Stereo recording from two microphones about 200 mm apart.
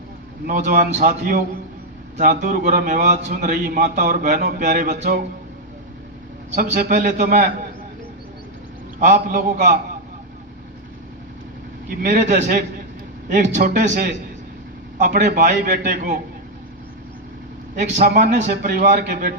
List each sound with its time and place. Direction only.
0.4 s a man's voice: 45° right (ahead or behind)
6.5 s a man's voice: 40° right (ahead or behind)
9.0 s a man's voice: 40° right (ahead or behind)
12.0 s a man's voice: 45° right (ahead or behind)
17.7 s a man's voice: 35° right (ahead or behind)